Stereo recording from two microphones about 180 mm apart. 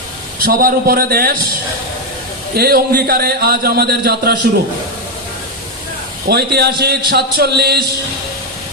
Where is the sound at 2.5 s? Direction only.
60° right (ahead or behind).